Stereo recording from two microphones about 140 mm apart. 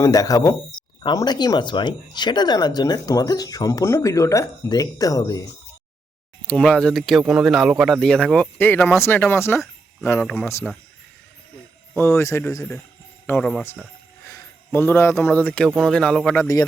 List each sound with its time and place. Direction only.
0.0 s speech: 25° left (ahead or behind)
6.5 s speech: 5° left (ahead or behind)
11.9 s speech: 15° left (ahead or behind)
13.4 s speech: 5° left (ahead or behind)
14.3 s a man's voice: 20° left (ahead or behind); by 16.4 s 5° left (ahead or behind)
16.4 s speech: 25° left (ahead or behind)